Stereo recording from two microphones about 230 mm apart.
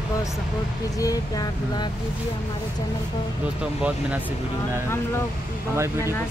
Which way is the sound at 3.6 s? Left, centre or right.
Centre.